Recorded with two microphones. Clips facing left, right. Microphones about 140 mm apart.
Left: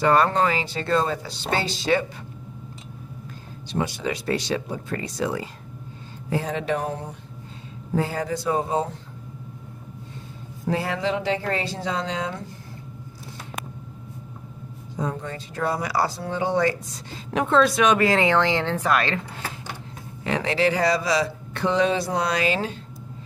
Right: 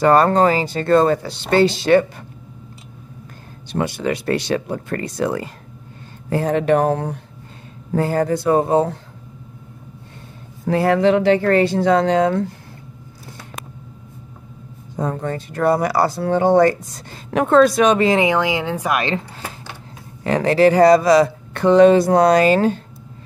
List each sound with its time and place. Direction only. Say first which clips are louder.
0.0 s speech: right 6 dB; 40° right (ahead or behind); by 2.0 s 60° right (ahead or behind)
3.7 s speech: right 5 dB; 60° right (ahead or behind)
7.9 s speech: right 7 dB; 50° right (ahead or behind)
10.7 s speech: right 10 dB; 55° right (ahead or behind)
15.0 s speech: right 6 dB; 50° right (ahead or behind)
17.9 s speech: right 4 dB; 20° right (ahead or behind)
20.2 s speech: right 8 dB; 45° right (ahead or behind)